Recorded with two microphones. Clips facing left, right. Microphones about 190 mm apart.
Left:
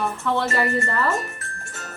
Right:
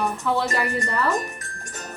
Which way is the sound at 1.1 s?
15° right (ahead or behind).